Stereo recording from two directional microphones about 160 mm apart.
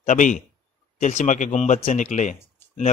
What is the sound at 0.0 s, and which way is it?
A man's voice, 50° left (ahead or behind).